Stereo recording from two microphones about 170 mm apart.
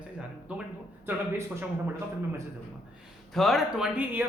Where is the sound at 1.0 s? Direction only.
15° right (ahead or behind).